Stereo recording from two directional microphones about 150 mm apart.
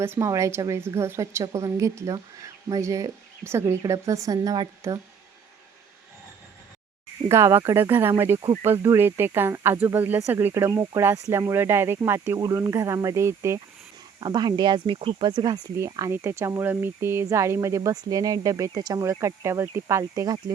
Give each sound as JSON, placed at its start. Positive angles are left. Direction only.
{"t": 0.0, "sound": "speech", "side_deg": -20}
{"t": 7.3, "sound": "speech", "side_deg": -20}
{"t": 14.2, "sound": "speech", "side_deg": -30}